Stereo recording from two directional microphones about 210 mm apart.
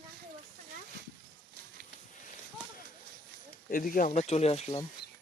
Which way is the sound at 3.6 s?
40° left (ahead or behind).